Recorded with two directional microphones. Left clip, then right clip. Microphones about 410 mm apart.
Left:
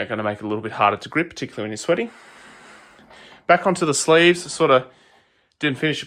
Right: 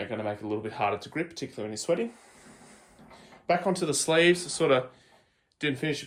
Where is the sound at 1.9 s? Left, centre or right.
Left.